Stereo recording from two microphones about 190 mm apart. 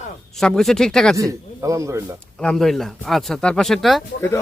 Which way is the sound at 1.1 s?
15° right (ahead or behind).